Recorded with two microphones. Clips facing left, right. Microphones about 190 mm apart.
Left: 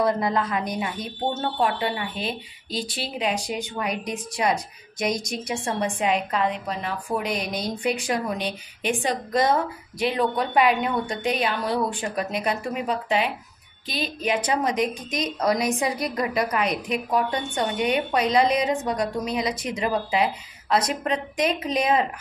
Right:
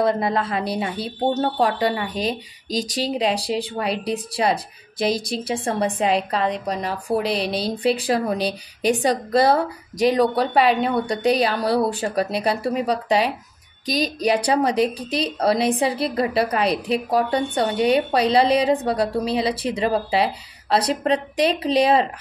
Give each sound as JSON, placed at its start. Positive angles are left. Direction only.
{"t": 0.0, "sound": "a woman's voice", "side_deg": -25}